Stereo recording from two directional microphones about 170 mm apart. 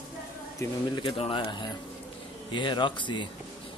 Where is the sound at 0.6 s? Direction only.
25° left (ahead or behind).